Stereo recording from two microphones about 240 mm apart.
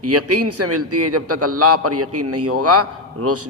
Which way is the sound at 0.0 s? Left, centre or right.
Right.